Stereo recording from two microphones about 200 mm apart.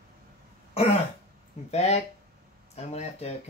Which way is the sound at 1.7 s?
35° left (ahead or behind).